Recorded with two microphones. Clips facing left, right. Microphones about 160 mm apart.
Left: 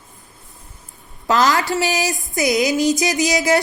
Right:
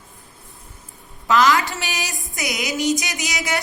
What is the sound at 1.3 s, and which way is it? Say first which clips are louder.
Speech: left 1 dB; 40° left (ahead or behind).